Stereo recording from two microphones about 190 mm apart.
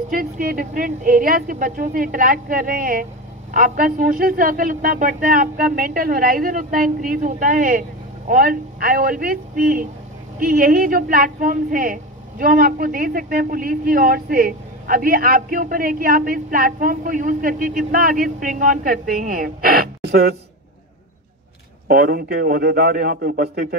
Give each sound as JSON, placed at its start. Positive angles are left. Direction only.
{"t": 0.1, "sound": "a woman's voice", "side_deg": -50}
{"t": 21.8, "sound": "a man's voice", "side_deg": -55}